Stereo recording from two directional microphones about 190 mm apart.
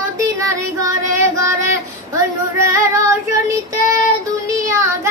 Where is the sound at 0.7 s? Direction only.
15° right (ahead or behind).